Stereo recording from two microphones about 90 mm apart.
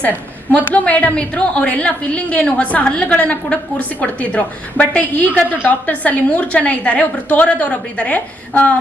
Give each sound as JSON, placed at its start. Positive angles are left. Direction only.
{"t": 0.5, "sound": "a woman's voice", "side_deg": 15}